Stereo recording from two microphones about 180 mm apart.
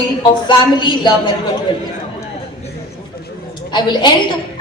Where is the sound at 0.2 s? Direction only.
25° left (ahead or behind).